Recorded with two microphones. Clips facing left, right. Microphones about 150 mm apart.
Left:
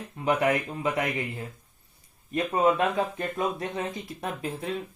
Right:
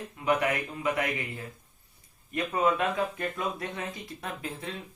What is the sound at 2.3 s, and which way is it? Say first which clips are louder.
Speech: left 3 dB; 30° left (ahead or behind).